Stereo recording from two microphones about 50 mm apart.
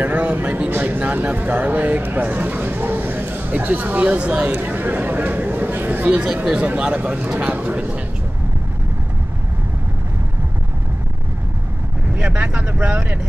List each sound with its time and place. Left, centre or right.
0.0 s speech: right
4.5 s a sound: right
6.4 s speech: right
6.9 s speech: right
12.2 s speech: right